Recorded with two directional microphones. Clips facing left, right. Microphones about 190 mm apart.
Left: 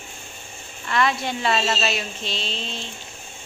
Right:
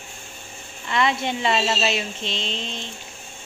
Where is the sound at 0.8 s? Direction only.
20° right (ahead or behind).